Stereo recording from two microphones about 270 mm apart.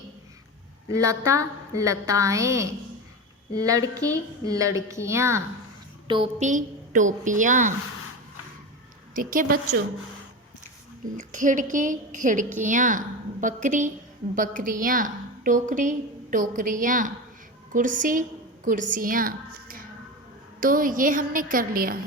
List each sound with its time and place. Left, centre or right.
0.9 s a woman's voice: centre; by 7.7 s right
9.1 s a woman's voice: right
11.2 s a woman's voice: right
19.5 s music: right
20.6 s a woman's voice: right